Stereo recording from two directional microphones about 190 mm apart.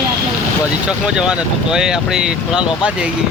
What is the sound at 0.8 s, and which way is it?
Speech, 5° right (ahead or behind).